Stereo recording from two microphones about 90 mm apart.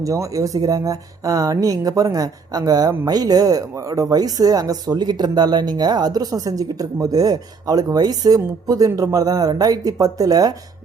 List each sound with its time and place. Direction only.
0.0 s speech: 35° right (ahead or behind)